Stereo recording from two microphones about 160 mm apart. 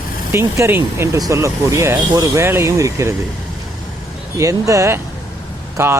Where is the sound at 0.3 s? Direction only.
15° right (ahead or behind).